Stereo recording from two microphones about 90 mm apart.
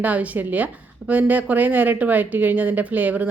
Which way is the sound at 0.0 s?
20° right (ahead or behind).